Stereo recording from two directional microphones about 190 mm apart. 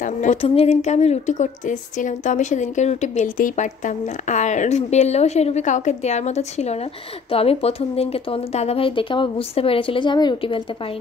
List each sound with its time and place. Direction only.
0.0 s speech: 40° left (ahead or behind)